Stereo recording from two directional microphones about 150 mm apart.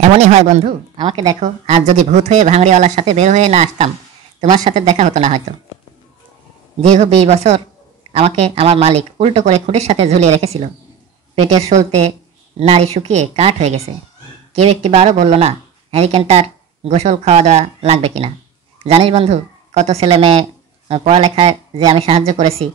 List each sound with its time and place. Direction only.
0.0 s speech: 50° right (ahead or behind)
0.9 s a woman's voice: 30° right (ahead or behind)
1.4 s speech: 50° right (ahead or behind)
7.0 s speech: 45° right (ahead or behind)